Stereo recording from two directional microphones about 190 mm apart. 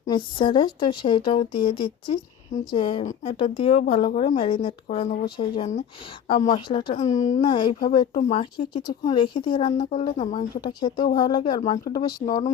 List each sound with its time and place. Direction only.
0.1 s speech: 25° left (ahead or behind)
5.2 s speech: 25° left (ahead or behind)
6.9 s speech: 40° left (ahead or behind)
7.4 s speech: 25° left (ahead or behind)